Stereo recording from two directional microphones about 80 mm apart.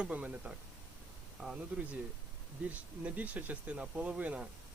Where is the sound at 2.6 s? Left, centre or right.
Centre.